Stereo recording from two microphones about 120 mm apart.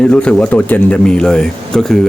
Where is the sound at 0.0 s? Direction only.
5° left (ahead or behind).